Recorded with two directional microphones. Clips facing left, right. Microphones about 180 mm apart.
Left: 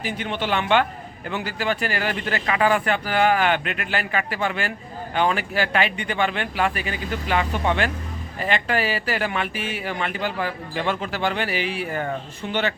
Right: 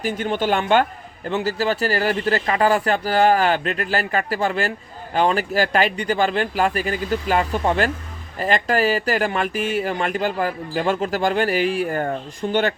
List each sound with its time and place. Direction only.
0.0 s speech: 45° right (ahead or behind)